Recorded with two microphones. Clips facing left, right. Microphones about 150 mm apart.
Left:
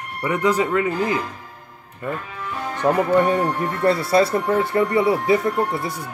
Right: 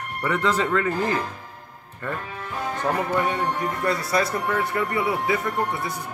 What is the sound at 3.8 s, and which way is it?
Speech, 30° left (ahead or behind).